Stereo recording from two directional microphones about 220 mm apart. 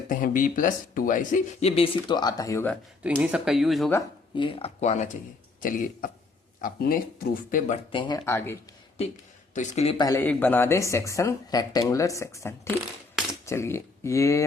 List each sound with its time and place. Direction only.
0.1 s speech: 35° left (ahead or behind); by 2.7 s 15° left (ahead or behind)
3.0 s speech: 5° right (ahead or behind)
4.4 s speech: 25° left (ahead or behind)
7.9 s speech: 20° left (ahead or behind)
9.6 s speech: 30° left (ahead or behind)
10.0 s speech: 15° left (ahead or behind)